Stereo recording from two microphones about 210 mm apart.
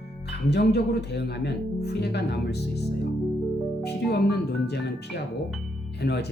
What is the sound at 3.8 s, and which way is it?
Speech, 50° left (ahead or behind).